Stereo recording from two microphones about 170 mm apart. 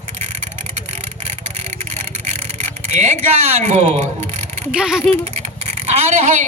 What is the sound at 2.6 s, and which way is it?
Speech, 45° right (ahead or behind).